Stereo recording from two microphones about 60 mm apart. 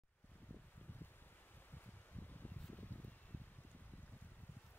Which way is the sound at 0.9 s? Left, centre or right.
Left.